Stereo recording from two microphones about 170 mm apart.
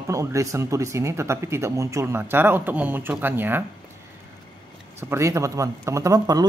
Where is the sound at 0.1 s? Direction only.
20° right (ahead or behind).